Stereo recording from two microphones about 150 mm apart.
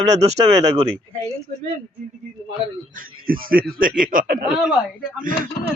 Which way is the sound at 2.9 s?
70° right (ahead or behind).